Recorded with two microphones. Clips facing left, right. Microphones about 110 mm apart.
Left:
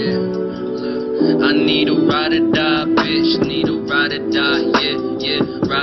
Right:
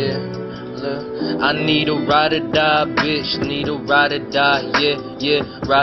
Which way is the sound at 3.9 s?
35° right (ahead or behind).